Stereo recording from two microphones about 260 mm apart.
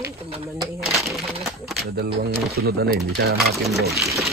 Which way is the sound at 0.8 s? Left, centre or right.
Centre.